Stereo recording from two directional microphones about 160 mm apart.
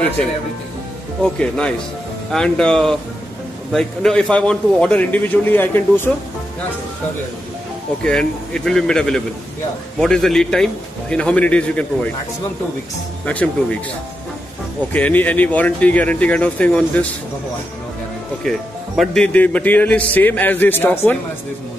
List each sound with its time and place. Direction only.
1.2 s a man's voice: 5° left (ahead or behind)
8.0 s a man's voice: 5° left (ahead or behind)
13.2 s speech: 10° left (ahead or behind)
14.9 s speech: 10° left (ahead or behind)
18.4 s speech: 5° left (ahead or behind)